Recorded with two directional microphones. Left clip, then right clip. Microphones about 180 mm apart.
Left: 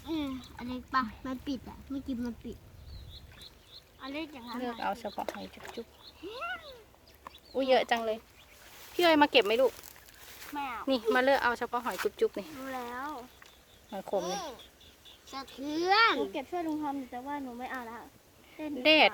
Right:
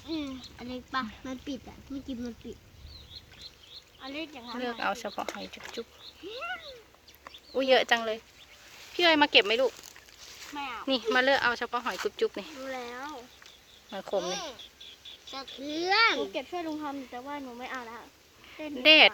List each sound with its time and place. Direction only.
0.1 s a sound: 50° left (ahead or behind)
4.0 s speech: 45° left (ahead or behind)
4.6 s speech: 10° right (ahead or behind)
6.2 s speech: 50° left (ahead or behind)
7.5 s speech: 10° right (ahead or behind)
9.0 s speech: 20° left (ahead or behind)
10.5 s speech: 50° left (ahead or behind)
10.8 s speech: 10° left (ahead or behind)
12.7 s speech: 40° left (ahead or behind)
14.2 s speech: 35° left (ahead or behind)
15.3 s speech: 50° left (ahead or behind)
18.8 s speech: centre (ahead or behind)